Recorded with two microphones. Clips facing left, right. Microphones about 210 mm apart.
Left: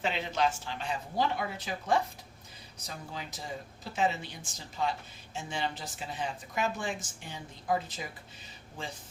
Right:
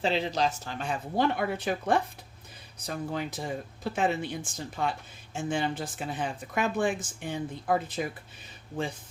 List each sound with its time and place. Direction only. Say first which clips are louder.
0.0 s speech: right 3 dB; 35° right (ahead or behind); by 8.0 s 55° right (ahead or behind)